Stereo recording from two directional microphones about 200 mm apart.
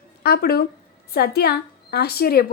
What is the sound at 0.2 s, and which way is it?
A woman's voice, 50° left (ahead or behind).